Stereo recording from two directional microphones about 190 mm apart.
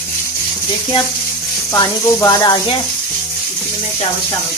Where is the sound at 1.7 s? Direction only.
15° left (ahead or behind).